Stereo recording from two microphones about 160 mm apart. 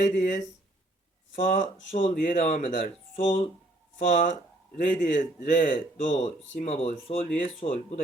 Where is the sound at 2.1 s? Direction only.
55° left (ahead or behind); by 7.7 s 35° left (ahead or behind).